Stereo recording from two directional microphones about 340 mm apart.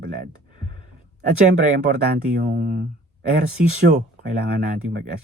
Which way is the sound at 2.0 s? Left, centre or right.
Right.